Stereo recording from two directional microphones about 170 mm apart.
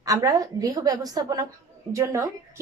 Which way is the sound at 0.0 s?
20° right (ahead or behind).